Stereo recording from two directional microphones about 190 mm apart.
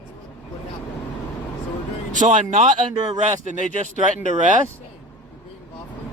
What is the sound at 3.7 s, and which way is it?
Speech, 45° left (ahead or behind).